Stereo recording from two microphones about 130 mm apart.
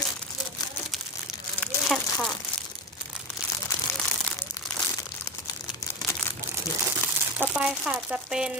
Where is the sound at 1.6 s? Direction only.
Centre (ahead or behind).